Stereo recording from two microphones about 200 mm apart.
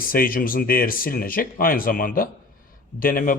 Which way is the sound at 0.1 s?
45° left (ahead or behind).